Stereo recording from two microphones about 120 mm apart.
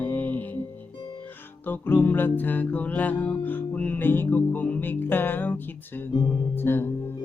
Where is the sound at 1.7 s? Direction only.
15° left (ahead or behind).